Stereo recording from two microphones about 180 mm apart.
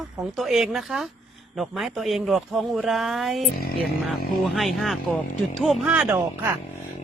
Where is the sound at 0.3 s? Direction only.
Centre (ahead or behind).